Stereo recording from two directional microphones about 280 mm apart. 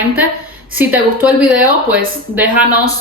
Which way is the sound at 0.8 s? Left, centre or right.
Centre.